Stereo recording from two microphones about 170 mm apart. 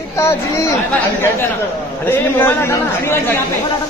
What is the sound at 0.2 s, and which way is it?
Speech, 15° left (ahead or behind).